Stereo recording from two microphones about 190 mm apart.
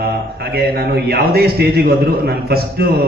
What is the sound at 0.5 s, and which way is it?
A man's voice, 55° right (ahead or behind).